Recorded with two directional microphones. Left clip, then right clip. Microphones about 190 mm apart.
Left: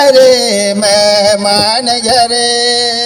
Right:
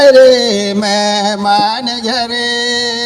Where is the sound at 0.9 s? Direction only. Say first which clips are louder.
Left 7 dB; 45° left (ahead or behind).